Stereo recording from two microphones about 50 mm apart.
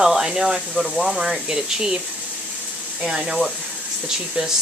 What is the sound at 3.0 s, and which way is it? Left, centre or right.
Speech, centre.